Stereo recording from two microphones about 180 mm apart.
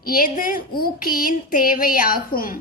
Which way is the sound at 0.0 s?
50° left (ahead or behind).